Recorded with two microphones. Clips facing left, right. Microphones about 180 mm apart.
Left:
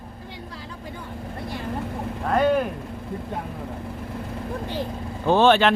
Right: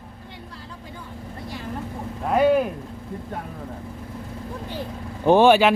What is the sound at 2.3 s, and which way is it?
Speech, 5° right (ahead or behind).